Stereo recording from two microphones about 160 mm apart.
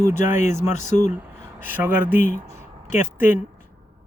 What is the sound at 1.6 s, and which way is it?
Speech, 10° right (ahead or behind).